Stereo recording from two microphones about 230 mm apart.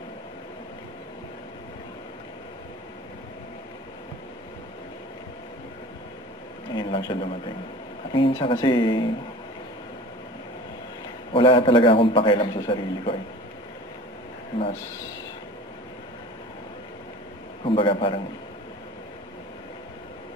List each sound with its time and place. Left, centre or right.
6.7 s a sound: centre
8.1 s a man's voice: centre
11.3 s a man's voice: left
17.6 s a man's voice: left